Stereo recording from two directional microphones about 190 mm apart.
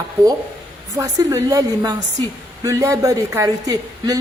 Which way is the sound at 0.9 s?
15° right (ahead or behind).